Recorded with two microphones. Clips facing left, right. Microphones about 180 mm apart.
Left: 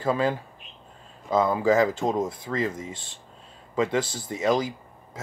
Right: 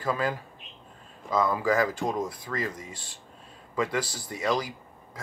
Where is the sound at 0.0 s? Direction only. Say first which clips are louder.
Left 4 dB; 25° left (ahead or behind).